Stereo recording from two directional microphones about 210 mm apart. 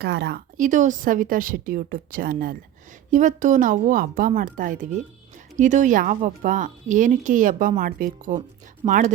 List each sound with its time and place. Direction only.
0.0 s speech: 55° right (ahead or behind)
0.5 s speech: 35° right (ahead or behind)